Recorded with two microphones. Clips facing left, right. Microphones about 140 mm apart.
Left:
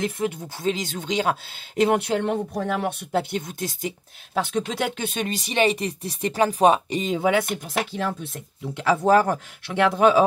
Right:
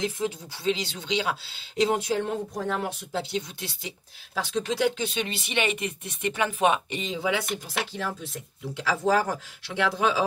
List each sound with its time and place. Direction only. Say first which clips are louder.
0.0 s speech: left 3 dB; 55° left (ahead or behind)